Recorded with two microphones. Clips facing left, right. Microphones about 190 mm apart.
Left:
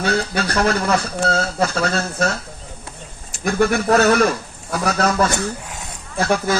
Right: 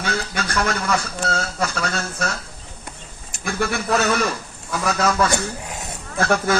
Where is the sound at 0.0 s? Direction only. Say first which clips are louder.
Left 5 dB; 35° left (ahead or behind).